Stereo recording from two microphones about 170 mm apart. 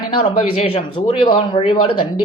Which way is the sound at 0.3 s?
40° left (ahead or behind).